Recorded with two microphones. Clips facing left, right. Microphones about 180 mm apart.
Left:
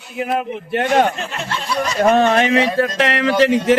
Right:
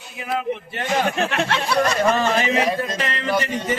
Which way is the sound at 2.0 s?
60° left (ahead or behind).